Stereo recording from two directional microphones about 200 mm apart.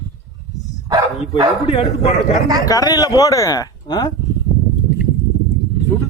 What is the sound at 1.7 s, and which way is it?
Speech, 30° left (ahead or behind).